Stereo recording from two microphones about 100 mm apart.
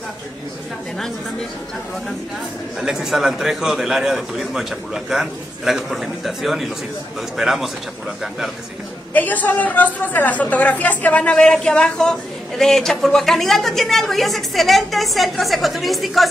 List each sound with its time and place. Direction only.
2.8 s speech: 5° right (ahead or behind)
9.1 s a woman's voice: 15° left (ahead or behind); by 16.3 s centre (ahead or behind)